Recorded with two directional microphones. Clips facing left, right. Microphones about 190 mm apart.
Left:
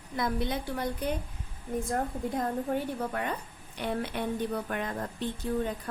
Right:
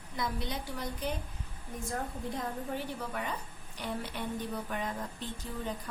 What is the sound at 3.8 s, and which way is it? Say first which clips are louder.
Speech: left 6 dB; 60° left (ahead or behind).